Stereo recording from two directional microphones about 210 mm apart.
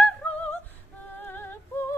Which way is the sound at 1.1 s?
10° left (ahead or behind).